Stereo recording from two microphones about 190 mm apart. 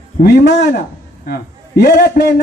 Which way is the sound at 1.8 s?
55° left (ahead or behind).